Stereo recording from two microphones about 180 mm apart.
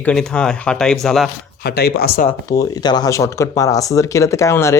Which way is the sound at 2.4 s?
20° left (ahead or behind).